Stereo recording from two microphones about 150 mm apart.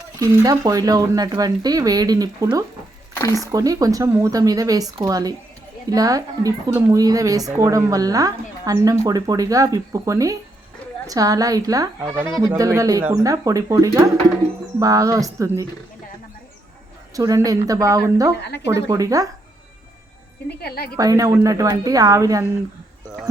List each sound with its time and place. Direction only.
0.2 s speech: 25° right (ahead or behind)
3.2 s speech: 20° left (ahead or behind)
3.4 s speech: 25° right (ahead or behind)
17.2 s speech: 25° right (ahead or behind)
20.6 s a woman's voice: 90° left
20.9 s speech: 25° right (ahead or behind)